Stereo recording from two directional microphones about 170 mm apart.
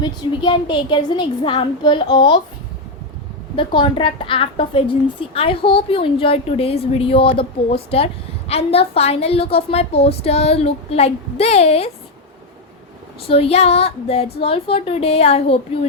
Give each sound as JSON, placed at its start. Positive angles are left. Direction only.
{"t": 0.0, "sound": "a woman's voice", "side_deg": 25}
{"t": 3.5, "sound": "a woman's voice", "side_deg": 30}
{"t": 13.2, "sound": "a woman's voice", "side_deg": 35}